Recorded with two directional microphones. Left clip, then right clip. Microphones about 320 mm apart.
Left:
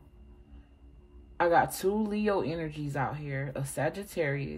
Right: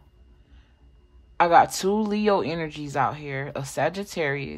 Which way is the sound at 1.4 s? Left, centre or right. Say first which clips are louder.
Right 8 dB; centre.